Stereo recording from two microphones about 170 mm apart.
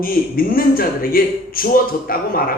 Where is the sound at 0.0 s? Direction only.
60° left (ahead or behind).